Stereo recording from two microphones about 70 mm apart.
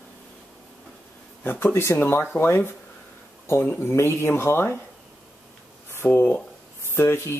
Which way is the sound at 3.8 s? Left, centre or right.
Left.